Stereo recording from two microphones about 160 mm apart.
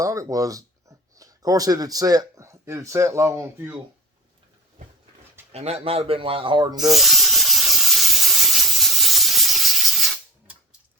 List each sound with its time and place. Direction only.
0.0 s speech: 20° right (ahead or behind)
5.5 s speech: 40° right (ahead or behind)
6.7 s a sound: centre (ahead or behind)
8.8 s steam: centre (ahead or behind)